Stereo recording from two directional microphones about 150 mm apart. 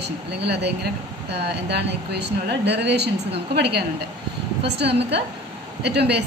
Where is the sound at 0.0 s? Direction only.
90° right.